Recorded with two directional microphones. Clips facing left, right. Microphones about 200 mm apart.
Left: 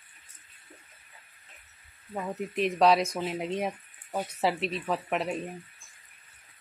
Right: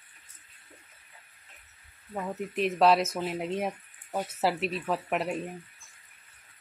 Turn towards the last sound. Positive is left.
turn(degrees=-5)  # may be behind; listen again after turning